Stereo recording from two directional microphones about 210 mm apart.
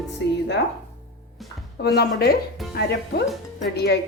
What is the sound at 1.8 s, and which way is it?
Speech, 50° left (ahead or behind).